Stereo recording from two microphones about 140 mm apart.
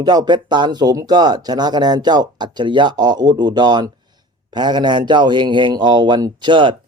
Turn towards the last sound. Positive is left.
turn(degrees=-35)  # may be behind; listen again after turning